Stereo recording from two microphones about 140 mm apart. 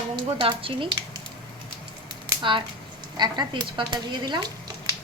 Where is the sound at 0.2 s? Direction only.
35° right (ahead or behind).